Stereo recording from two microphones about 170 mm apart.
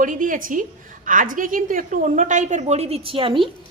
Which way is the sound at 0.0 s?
50° right (ahead or behind).